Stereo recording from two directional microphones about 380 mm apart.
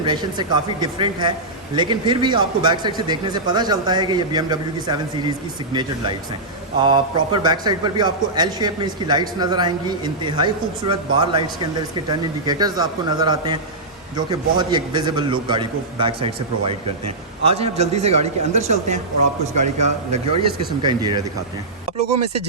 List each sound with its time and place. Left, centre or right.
0.0 s a man's voice: centre
6.8 s a man's voice: centre